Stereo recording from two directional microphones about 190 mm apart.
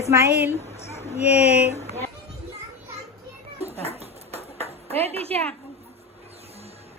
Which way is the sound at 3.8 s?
35° right (ahead or behind).